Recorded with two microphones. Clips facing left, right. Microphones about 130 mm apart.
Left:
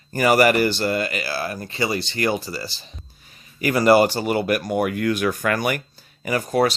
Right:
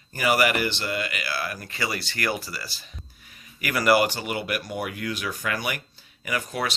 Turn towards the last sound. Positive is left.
turn(degrees=40)  # may be behind; listen again after turning